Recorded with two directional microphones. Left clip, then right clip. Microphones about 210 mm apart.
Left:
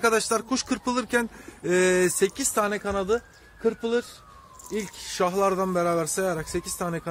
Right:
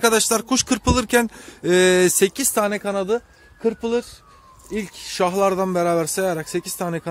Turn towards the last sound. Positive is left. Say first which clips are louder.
# right 4 dB
turn(degrees=-50)  # may be behind; listen again after turning